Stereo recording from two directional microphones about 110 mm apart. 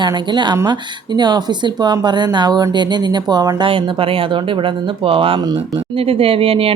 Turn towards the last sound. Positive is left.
turn(degrees=-60)  # may be behind; listen again after turning